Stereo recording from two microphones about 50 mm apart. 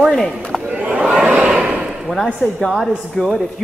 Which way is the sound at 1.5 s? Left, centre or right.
Centre.